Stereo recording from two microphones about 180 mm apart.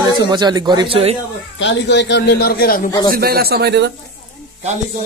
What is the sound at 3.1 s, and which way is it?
Speech, 60° right (ahead or behind).